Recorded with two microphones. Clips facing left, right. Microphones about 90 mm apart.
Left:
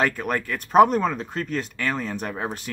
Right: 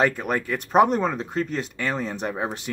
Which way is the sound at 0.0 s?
15° right (ahead or behind).